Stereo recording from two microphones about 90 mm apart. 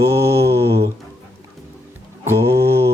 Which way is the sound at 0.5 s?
30° right (ahead or behind).